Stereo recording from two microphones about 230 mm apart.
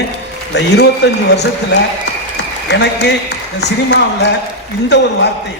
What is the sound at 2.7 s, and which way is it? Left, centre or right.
A man's voice, left.